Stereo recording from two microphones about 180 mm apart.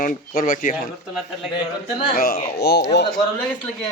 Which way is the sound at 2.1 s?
55° left (ahead or behind).